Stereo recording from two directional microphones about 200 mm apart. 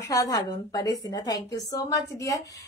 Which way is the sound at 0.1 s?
15° left (ahead or behind).